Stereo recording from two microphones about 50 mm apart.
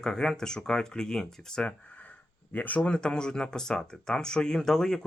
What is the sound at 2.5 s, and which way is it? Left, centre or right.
Speech, left.